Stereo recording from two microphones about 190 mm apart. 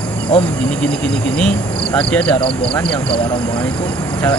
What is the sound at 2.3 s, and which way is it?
Speech, 30° left (ahead or behind).